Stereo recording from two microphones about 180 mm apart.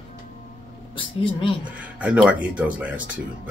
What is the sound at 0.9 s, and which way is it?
Speech, 30° left (ahead or behind).